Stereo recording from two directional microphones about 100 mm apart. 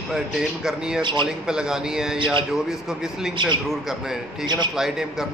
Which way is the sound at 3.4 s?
50° right (ahead or behind).